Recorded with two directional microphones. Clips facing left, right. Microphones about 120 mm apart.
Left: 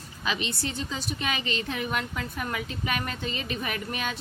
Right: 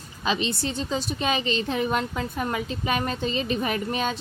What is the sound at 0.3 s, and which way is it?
A woman's voice, 30° right (ahead or behind).